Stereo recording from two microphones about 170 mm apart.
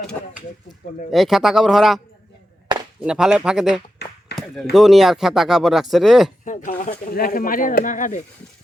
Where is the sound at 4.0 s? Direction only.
75° left (ahead or behind).